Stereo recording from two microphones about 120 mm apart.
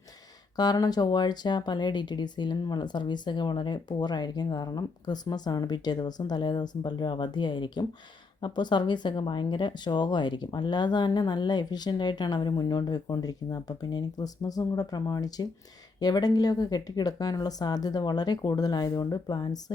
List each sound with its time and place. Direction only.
0.5 s speech: 35° left (ahead or behind)